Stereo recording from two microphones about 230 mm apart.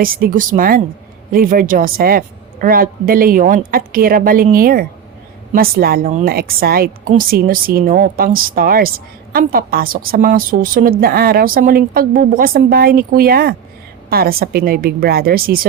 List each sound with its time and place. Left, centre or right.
0.0 s a woman's voice: right